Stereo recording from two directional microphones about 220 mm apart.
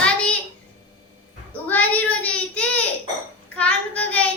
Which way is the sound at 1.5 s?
5° left (ahead or behind).